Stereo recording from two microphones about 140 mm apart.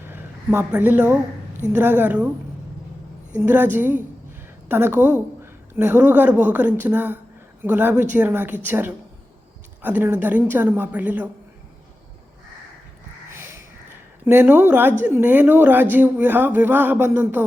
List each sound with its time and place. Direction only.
0.0 s a woman's voice: 15° right (ahead or behind)
3.3 s speech: 15° right (ahead or behind)
13.3 s a sound: 15° right (ahead or behind)
14.3 s speech: 15° right (ahead or behind)